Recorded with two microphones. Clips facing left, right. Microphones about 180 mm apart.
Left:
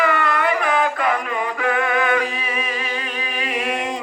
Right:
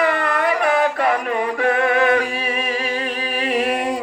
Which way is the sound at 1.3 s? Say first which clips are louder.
Right 3 dB; 35° right (ahead or behind).